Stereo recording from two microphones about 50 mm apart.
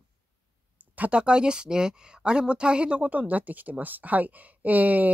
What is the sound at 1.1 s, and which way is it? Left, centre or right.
Speech, centre.